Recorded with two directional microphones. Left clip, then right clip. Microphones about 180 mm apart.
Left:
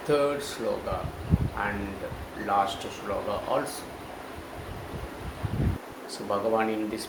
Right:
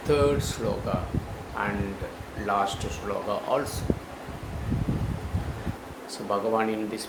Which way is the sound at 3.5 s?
15° right (ahead or behind).